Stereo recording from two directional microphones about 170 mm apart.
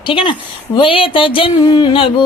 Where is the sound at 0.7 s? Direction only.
30° left (ahead or behind).